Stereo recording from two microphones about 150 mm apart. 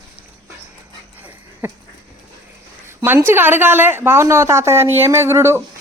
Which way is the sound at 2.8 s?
15° right (ahead or behind).